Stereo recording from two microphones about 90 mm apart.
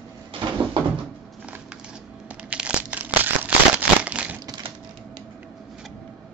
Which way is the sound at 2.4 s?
15° right (ahead or behind).